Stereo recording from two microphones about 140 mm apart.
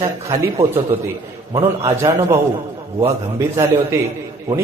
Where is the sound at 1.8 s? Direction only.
20° right (ahead or behind).